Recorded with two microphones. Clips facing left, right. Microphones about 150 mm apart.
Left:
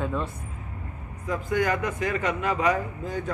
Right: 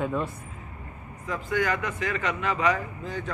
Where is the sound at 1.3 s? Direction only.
45° left (ahead or behind).